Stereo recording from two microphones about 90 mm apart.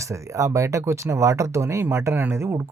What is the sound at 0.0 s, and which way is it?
Speech, 35° right (ahead or behind).